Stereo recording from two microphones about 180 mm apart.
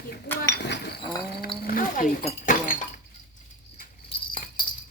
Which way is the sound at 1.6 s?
50° left (ahead or behind).